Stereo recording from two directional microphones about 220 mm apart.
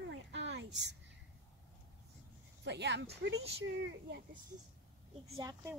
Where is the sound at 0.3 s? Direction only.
55° right (ahead or behind).